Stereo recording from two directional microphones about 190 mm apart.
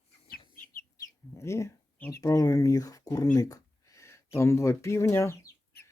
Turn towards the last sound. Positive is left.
turn(degrees=60)  # may be behind; listen again after turning